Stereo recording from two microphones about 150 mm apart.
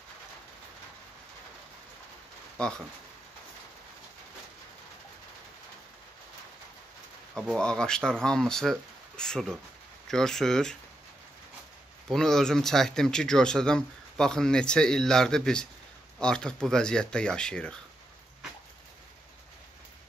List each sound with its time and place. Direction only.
2.6 s speech: 5° left (ahead or behind)
7.3 s speech: 5° left (ahead or behind)
12.1 s speech: 5° left (ahead or behind)